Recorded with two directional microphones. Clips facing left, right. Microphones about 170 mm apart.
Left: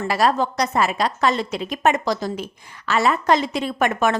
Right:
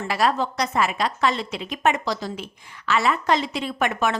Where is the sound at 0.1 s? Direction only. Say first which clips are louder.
Left 2 dB; 40° left (ahead or behind).